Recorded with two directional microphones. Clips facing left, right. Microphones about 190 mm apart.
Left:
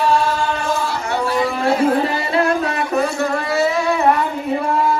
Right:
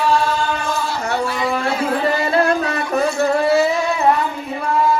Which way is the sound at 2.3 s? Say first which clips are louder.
Right 1 dB; 40° right (ahead or behind).